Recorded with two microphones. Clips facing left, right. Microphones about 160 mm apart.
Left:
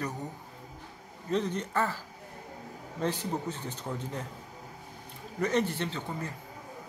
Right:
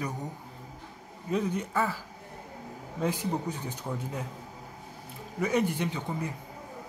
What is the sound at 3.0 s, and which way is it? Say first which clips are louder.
Speech: right 2 dB; 10° right (ahead or behind).